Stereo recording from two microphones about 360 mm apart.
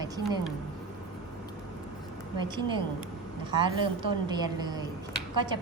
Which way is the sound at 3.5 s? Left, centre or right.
Centre.